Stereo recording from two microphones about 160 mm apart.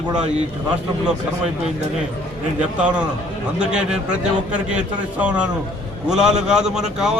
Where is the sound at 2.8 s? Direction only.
10° right (ahead or behind).